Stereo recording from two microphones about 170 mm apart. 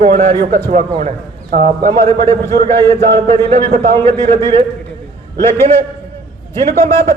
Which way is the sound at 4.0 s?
15° left (ahead or behind).